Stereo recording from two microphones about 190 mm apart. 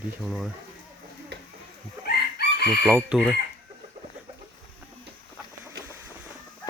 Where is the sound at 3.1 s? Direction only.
Centre (ahead or behind).